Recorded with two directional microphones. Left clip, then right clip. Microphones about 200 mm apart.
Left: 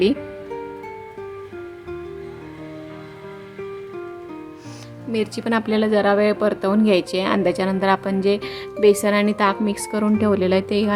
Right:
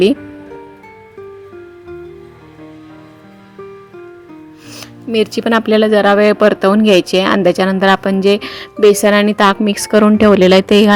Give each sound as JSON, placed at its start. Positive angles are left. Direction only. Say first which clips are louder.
{"t": 5.1, "sound": "speech", "louder": "right 9 dB", "side_deg": -30}